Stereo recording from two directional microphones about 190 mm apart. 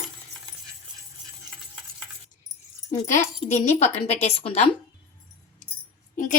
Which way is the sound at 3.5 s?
35° left (ahead or behind).